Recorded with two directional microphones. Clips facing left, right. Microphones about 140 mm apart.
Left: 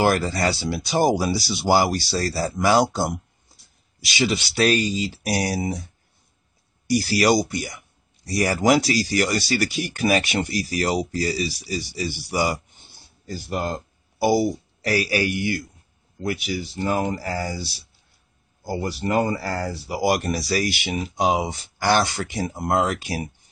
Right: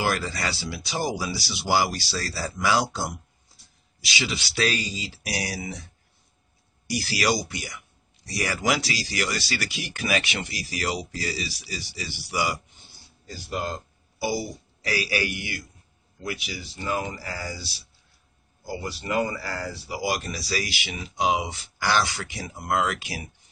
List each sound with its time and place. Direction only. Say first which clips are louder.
0.0 s speech: left 7 dB; 50° left (ahead or behind)
6.9 s speech: left 7 dB; 40° left (ahead or behind)
14.1 s a man's voice: left 9 dB; 55° left (ahead or behind); by 23.2 s 40° left (ahead or behind)